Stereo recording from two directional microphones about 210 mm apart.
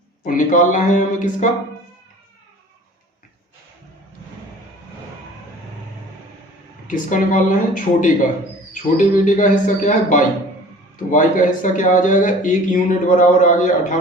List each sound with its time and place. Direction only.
0.3 s a man's voice: 40° left (ahead or behind)
6.8 s a man's voice: 40° left (ahead or behind)